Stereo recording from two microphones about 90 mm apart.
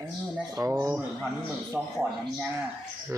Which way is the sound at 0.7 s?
25° right (ahead or behind).